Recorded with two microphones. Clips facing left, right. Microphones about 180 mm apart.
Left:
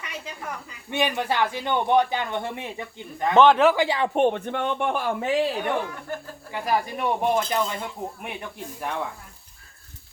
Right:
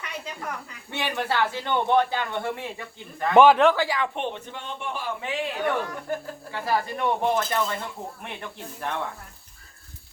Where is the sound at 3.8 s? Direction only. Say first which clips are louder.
Left 3 dB; 25° left (ahead or behind).